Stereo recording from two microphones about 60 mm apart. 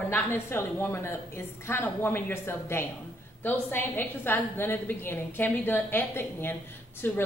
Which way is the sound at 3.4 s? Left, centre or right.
Left.